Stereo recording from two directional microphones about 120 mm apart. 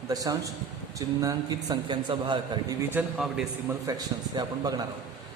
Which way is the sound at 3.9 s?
35° right (ahead or behind).